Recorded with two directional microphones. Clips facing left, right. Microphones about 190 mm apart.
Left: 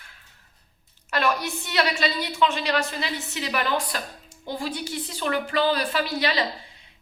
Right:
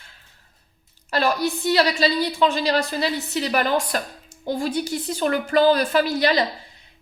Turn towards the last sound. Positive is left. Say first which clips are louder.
# right 6 dB
turn(degrees=-45)  # may be behind; listen again after turning